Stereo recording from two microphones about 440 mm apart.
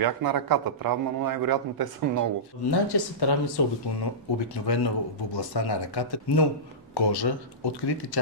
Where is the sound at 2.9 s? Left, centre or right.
Left.